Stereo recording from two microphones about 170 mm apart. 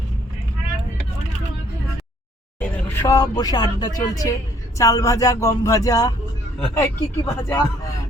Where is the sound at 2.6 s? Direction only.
10° left (ahead or behind).